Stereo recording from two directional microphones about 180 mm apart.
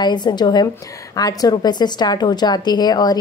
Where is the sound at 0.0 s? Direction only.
25° left (ahead or behind).